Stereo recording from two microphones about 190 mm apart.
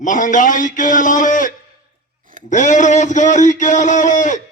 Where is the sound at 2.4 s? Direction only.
40° left (ahead or behind).